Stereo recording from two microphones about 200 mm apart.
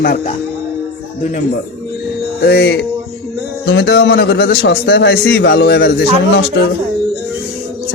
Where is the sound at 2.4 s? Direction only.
55° left (ahead or behind).